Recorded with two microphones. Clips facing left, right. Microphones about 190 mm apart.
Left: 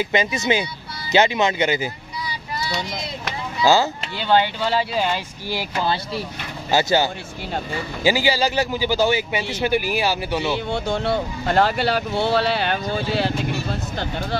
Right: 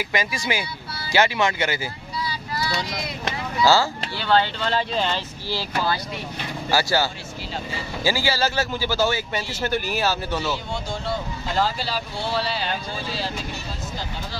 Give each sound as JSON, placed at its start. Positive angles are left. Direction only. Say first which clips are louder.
{"t": 0.0, "sound": "speech", "louder": "left 5 dB", "side_deg": 25}
{"t": 3.6, "sound": "speech", "louder": "left 2 dB", "side_deg": 20}
{"t": 10.5, "sound": "speech", "louder": "left 6 dB", "side_deg": 65}